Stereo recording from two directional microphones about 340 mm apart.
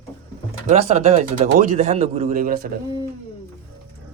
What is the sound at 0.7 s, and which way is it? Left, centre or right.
A man's voice, centre.